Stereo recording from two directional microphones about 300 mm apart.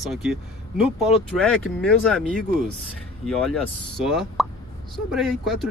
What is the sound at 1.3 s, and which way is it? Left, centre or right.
Speech, centre.